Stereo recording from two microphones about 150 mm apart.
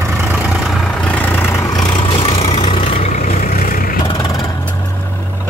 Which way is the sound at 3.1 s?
55° left (ahead or behind).